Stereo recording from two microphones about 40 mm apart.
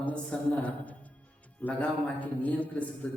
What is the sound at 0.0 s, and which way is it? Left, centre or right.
A man's voice, left.